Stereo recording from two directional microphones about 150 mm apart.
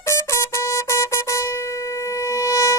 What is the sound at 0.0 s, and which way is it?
Vehicle horn, 20° left (ahead or behind).